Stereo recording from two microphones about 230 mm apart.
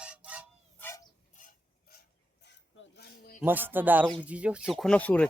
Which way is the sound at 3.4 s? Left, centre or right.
Centre.